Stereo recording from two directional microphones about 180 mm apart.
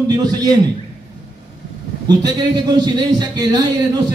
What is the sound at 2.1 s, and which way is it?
A man's voice, 25° right (ahead or behind).